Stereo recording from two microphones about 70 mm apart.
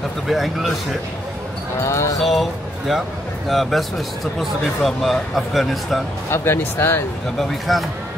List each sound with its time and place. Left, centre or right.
0.3 s a man's voice: centre
1.8 s speech: left
2.1 s a man's voice: centre
6.3 s speech: left
7.3 s a man's voice: centre